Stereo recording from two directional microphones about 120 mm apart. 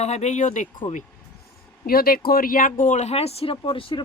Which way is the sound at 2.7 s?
90° left.